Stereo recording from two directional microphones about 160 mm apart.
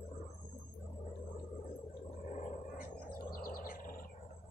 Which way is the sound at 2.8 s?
65° left (ahead or behind).